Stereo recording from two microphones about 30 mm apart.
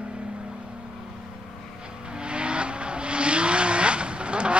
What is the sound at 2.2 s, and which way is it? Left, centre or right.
Vehicle, right.